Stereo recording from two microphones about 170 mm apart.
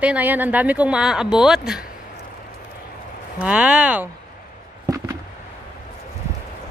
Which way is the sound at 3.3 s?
5° right (ahead or behind).